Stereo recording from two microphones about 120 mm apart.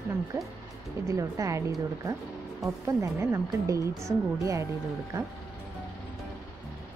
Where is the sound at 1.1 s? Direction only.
30° right (ahead or behind).